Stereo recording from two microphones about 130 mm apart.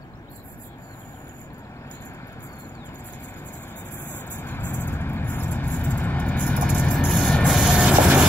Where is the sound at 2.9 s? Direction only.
15° left (ahead or behind).